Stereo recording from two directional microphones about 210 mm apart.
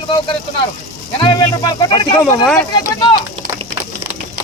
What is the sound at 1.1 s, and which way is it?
Speech, 20° left (ahead or behind).